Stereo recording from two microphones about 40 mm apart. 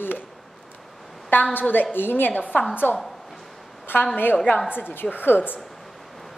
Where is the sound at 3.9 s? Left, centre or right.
Left.